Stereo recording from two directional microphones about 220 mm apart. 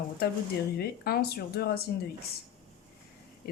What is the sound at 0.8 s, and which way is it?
Speech, 45° left (ahead or behind).